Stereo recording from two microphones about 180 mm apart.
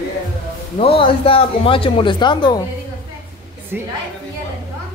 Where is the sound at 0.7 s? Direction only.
30° left (ahead or behind).